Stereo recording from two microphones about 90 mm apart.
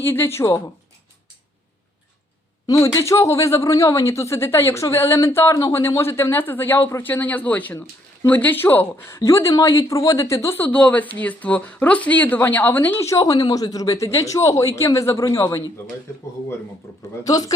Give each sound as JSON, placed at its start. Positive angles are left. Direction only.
{"t": 0.0, "sound": "speech", "side_deg": 25}
{"t": 2.6, "sound": "speech", "side_deg": 35}
{"t": 10.6, "sound": "speech", "side_deg": 15}
{"t": 13.0, "sound": "speech", "side_deg": 35}
{"t": 17.2, "sound": "speech", "side_deg": 45}